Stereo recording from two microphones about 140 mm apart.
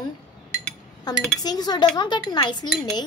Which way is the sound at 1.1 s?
30° left (ahead or behind).